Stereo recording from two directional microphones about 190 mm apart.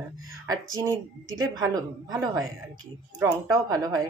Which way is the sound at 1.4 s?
20° right (ahead or behind).